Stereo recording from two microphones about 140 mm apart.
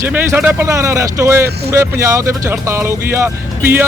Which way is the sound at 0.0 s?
15° right (ahead or behind).